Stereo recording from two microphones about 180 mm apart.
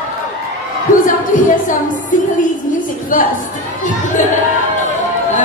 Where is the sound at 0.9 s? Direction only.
45° left (ahead or behind).